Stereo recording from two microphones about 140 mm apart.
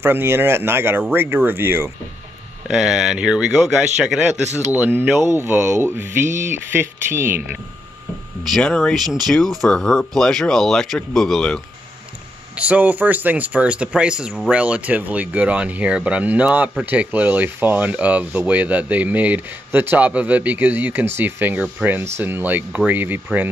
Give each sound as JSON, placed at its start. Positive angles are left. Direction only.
{"t": 0.0, "sound": "speech", "side_deg": -15}
{"t": 2.7, "sound": "speech", "side_deg": -5}
{"t": 8.5, "sound": "speech", "side_deg": 5}
{"t": 9.0, "sound": "speech", "side_deg": -30}
{"t": 9.3, "sound": "speech", "side_deg": 0}
{"t": 12.5, "sound": "speech", "side_deg": -10}